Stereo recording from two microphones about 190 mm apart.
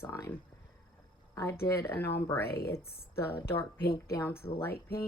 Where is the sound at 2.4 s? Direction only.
55° left (ahead or behind).